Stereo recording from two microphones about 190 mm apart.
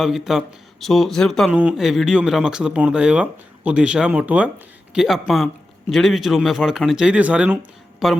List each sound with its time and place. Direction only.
0.0 s speech: centre (ahead or behind)